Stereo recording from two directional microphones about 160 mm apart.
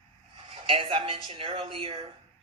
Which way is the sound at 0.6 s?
35° right (ahead or behind).